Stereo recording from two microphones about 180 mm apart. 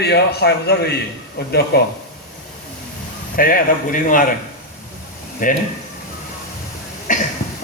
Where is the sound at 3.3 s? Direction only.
50° left (ahead or behind).